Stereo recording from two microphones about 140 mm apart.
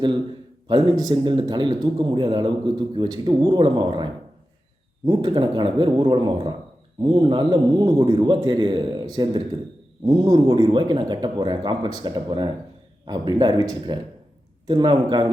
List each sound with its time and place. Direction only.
0.7 s a man's voice: 30° right (ahead or behind)